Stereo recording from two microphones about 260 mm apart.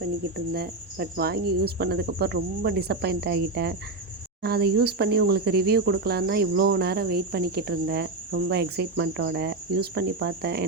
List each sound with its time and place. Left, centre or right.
0.3 s speech: right